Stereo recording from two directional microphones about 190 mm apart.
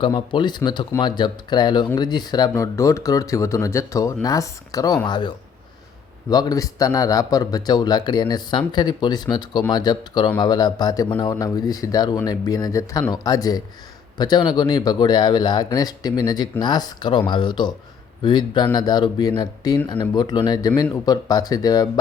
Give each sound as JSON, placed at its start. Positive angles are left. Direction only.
{"t": 0.0, "sound": "a man's voice", "side_deg": 25}
{"t": 6.3, "sound": "a man's voice", "side_deg": 20}